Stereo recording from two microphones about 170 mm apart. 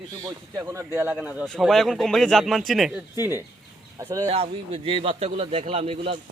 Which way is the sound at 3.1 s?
15° right (ahead or behind).